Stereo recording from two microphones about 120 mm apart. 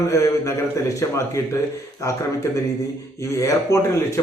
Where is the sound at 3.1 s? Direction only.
25° left (ahead or behind).